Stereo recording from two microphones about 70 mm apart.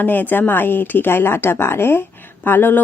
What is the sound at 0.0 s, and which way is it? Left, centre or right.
A woman's voice, left.